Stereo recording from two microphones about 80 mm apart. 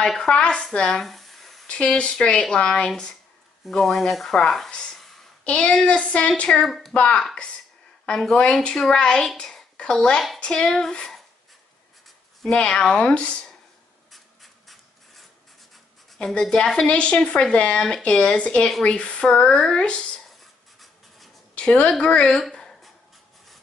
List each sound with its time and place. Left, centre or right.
0.0 s a woman's voice: centre
0.7 s a sound: centre
1.7 s a woman's voice: centre
6.6 s speech: centre
6.9 s a woman's voice: centre
12.4 s a woman's voice: centre
14.1 s filing: centre
16.2 s a woman's voice: centre
21.5 s a woman's voice: centre
22.4 s a sound: centre